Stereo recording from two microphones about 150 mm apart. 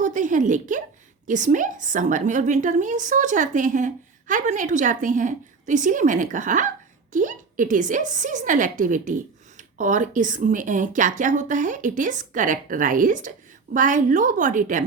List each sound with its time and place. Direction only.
0.0 s a woman's voice: 55° right (ahead or behind)